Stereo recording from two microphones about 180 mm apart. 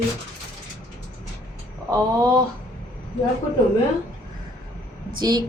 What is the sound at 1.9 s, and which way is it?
Speech, 20° right (ahead or behind).